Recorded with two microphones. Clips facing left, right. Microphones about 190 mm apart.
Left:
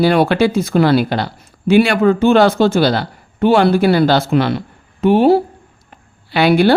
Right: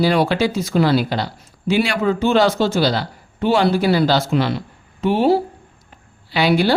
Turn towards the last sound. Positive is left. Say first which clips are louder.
# left 5 dB
turn(degrees=60)  # may be behind; listen again after turning